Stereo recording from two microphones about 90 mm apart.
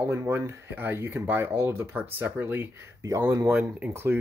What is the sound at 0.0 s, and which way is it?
Speech, 25° right (ahead or behind).